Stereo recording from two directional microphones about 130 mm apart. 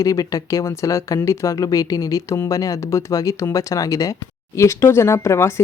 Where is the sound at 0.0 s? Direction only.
25° left (ahead or behind).